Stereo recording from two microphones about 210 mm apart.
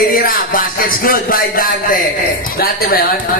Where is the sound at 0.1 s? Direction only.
40° left (ahead or behind).